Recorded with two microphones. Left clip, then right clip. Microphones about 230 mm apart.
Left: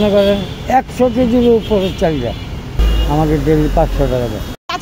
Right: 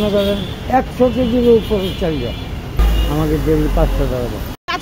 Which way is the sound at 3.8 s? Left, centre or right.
Left.